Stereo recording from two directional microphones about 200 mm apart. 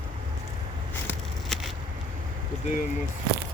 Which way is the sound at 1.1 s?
Centre (ahead or behind).